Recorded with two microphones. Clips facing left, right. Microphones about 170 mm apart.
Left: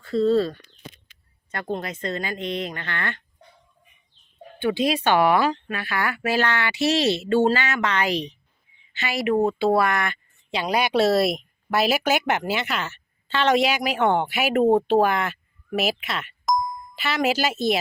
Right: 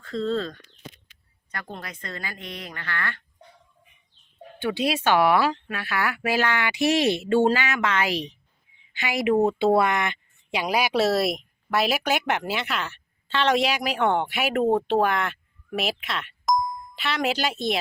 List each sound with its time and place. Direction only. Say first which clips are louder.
0.0 s speech: left 7 dB; 10° left (ahead or behind)
1.5 s a woman's voice: left 8 dB; 25° left (ahead or behind)
4.9 s speech: even; 5° right (ahead or behind)
8.9 s a woman's voice: even; 15° right (ahead or behind); by 17.7 s 5° left (ahead or behind)